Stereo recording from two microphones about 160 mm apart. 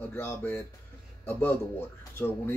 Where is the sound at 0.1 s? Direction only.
15° left (ahead or behind).